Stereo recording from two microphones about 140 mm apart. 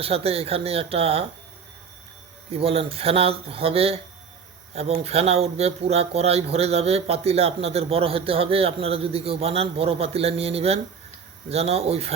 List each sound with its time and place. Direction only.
0.0 s speech: 45° right (ahead or behind)
2.5 s speech: 45° right (ahead or behind)